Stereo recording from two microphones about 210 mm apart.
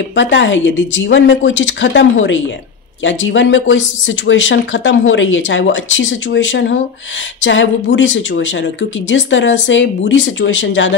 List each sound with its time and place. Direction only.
0.1 s speech: 60° left (ahead or behind)